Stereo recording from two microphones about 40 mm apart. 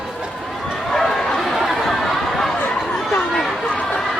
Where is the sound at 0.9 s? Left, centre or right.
Centre.